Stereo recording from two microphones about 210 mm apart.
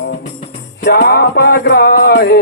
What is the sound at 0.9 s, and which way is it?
Music, 50° left (ahead or behind).